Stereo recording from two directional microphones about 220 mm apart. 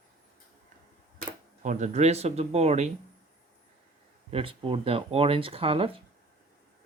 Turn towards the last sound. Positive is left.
turn(degrees=-25)  # may be behind; listen again after turning